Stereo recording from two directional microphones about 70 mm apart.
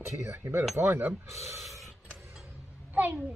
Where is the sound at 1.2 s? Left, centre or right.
Right.